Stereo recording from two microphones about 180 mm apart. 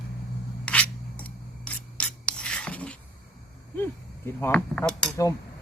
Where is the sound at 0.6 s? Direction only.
5° left (ahead or behind).